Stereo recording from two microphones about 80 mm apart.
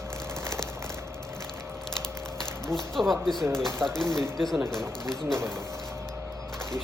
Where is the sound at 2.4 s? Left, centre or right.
Centre.